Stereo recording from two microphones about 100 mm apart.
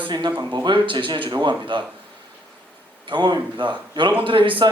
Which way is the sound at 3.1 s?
50° right (ahead or behind).